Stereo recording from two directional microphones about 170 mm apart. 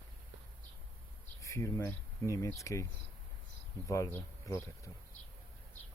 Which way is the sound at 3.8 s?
15° left (ahead or behind).